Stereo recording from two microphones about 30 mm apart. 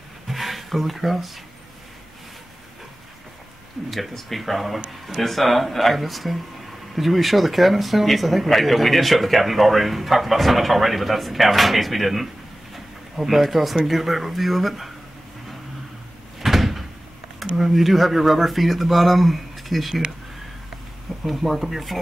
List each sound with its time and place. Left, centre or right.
0.3 s a sound: centre
3.8 s speech: right
4.1 s speech: centre
12.7 s a sound: centre
13.8 s speech: centre
16.3 s cupboard open or close: centre
17.4 s speech: centre
21.2 s speech: centre